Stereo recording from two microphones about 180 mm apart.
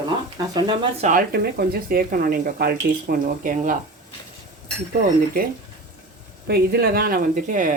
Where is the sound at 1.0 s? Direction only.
45° right (ahead or behind).